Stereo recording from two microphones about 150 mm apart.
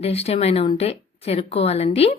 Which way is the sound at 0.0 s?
40° left (ahead or behind).